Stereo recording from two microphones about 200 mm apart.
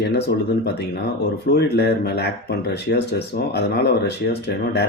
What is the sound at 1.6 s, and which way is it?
Speech, 55° left (ahead or behind).